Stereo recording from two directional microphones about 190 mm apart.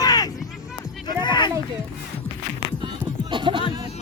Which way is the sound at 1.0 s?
25° left (ahead or behind).